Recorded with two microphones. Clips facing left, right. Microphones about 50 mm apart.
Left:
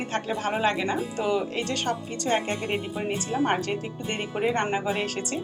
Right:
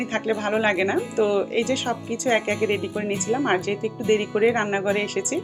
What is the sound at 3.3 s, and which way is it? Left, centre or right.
Speech, right.